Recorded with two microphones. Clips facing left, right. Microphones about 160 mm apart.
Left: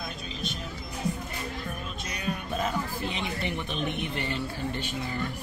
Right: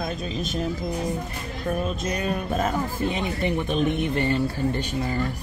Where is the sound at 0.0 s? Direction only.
45° right (ahead or behind).